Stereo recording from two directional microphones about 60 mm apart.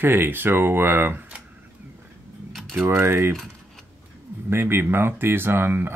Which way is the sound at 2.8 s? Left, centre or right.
Right.